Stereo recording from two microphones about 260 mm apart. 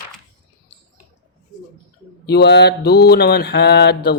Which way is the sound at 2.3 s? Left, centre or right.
Left.